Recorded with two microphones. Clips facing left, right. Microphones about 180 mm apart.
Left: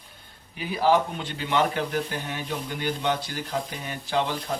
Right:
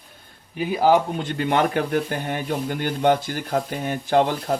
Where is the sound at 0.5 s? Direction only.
50° right (ahead or behind).